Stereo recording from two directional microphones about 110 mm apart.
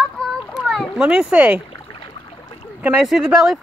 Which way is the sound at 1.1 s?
10° right (ahead or behind).